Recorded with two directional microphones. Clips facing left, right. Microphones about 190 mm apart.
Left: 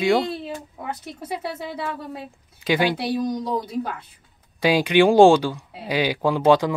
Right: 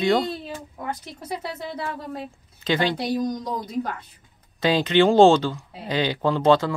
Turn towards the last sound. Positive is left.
turn(degrees=15)  # may be behind; listen again after turning